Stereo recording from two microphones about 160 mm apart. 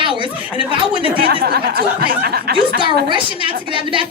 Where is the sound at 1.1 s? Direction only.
70° right (ahead or behind).